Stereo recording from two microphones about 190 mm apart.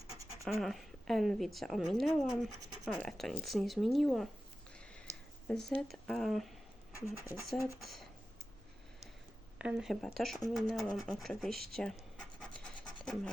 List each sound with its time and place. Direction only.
0.4 s a woman's voice: centre (ahead or behind)
5.1 s a sound: 15° right (ahead or behind)
5.5 s a woman's voice: 5° left (ahead or behind)
7.0 s speech: 15° left (ahead or behind)
7.8 s a woman's voice: centre (ahead or behind)
9.6 s a woman's voice: 5° right (ahead or behind)